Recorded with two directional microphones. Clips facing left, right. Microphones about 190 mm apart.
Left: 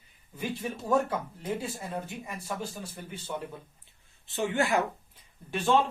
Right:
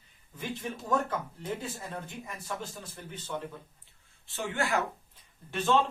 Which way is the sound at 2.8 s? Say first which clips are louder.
Left 3 dB; 10° left (ahead or behind).